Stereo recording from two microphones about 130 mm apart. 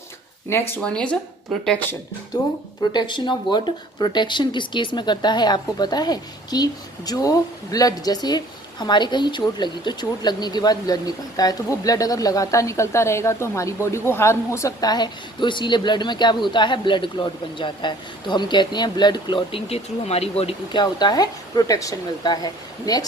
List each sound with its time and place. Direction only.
0.8 s speech: 10° left (ahead or behind)
2.3 s speech: 30° left (ahead or behind); by 20.6 s 50° left (ahead or behind)
20.7 s speech: 35° left (ahead or behind)